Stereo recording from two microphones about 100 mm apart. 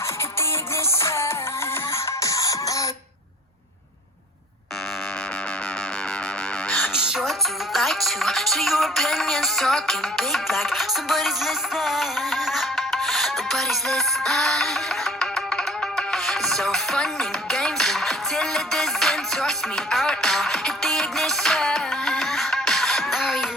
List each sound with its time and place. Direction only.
0.9 s music: 30° left (ahead or behind)
6.7 s music: 15° left (ahead or behind)
6.9 s music: 5° right (ahead or behind)